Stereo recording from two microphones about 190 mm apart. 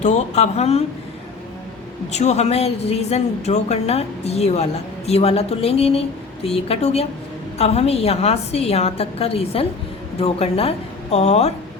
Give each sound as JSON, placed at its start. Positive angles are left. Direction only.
{"t": 0.0, "sound": "a woman's voice", "side_deg": 35}
{"t": 2.1, "sound": "a woman's voice", "side_deg": 35}